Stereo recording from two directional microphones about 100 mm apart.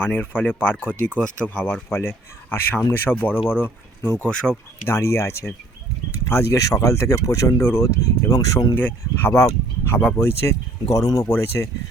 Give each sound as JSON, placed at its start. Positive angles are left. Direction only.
{"t": 0.0, "sound": "speech", "side_deg": 15}
{"t": 1.9, "sound": "speech", "side_deg": 25}
{"t": 4.9, "sound": "speech", "side_deg": 30}
{"t": 8.7, "sound": "speech", "side_deg": 20}